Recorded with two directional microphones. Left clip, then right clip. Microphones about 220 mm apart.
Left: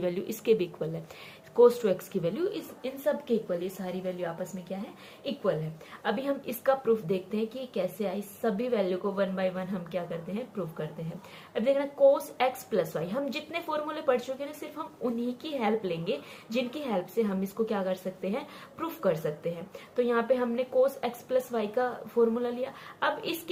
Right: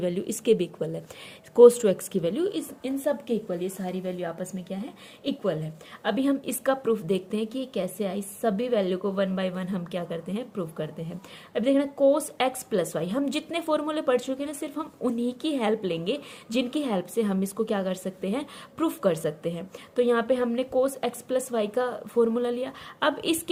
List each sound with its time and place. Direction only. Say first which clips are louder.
0.0 s a woman's voice: right 3 dB; 35° right (ahead or behind)